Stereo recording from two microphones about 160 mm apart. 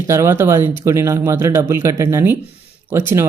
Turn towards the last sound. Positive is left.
turn(degrees=-15)  # may be behind; listen again after turning